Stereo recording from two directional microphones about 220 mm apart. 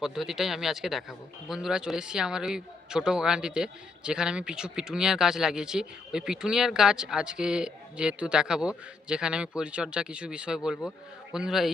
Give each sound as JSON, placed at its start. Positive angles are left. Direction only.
{"t": 0.0, "sound": "a man's voice", "side_deg": 0}